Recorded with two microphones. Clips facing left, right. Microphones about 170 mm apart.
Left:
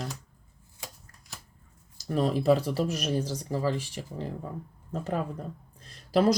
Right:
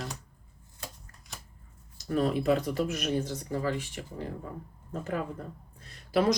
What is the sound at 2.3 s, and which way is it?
Speech, 35° left (ahead or behind).